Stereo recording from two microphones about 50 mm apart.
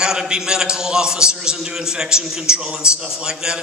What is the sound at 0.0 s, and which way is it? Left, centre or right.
A man's voice, centre.